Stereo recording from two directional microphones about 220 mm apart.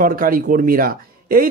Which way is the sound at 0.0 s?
40° right (ahead or behind).